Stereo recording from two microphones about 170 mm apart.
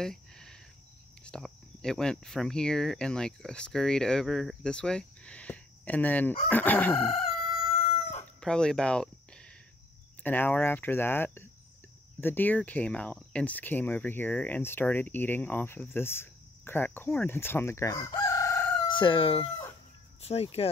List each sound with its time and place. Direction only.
0.0 s cricket: 5° left (ahead or behind)
1.2 s speech: 5° left (ahead or behind)
8.4 s speech: 5° left (ahead or behind)
18.1 s chicken: 20° left (ahead or behind)
18.9 s crowing: 30° left (ahead or behind)
20.2 s speech: 35° left (ahead or behind)